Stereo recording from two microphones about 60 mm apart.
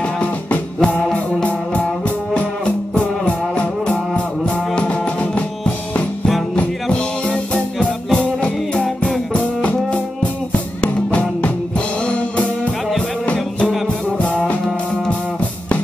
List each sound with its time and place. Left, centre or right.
0.2 s music: left
2.9 s music: centre
6.5 s music: centre
10.8 s music: left
13.8 s music: centre